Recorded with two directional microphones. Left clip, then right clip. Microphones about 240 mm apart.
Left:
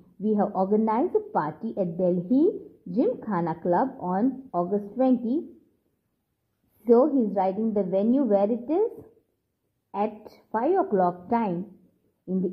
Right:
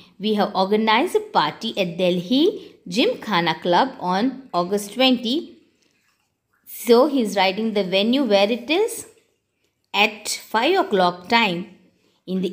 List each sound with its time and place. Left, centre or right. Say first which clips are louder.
0.2 s a woman's voice: right 5 dB; right
6.8 s a woman's voice: right 4 dB; right
9.8 s a woman's voice: right 10 dB; right